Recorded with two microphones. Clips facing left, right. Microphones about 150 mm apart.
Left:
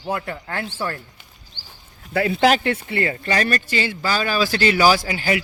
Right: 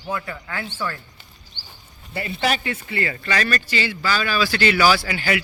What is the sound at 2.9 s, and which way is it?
Speech, 45° left (ahead or behind).